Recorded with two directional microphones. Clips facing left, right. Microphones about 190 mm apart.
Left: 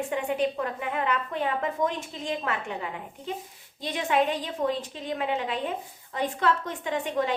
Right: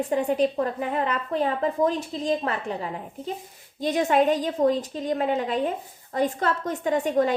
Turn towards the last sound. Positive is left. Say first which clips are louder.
# right 6 dB
turn(degrees=-45)  # may be behind; listen again after turning